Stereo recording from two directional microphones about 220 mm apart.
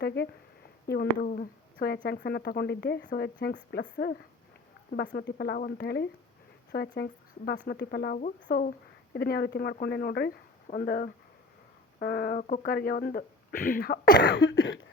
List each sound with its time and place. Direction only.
0.0 s speech: 45° left (ahead or behind)
5.1 s speech: 45° left (ahead or behind)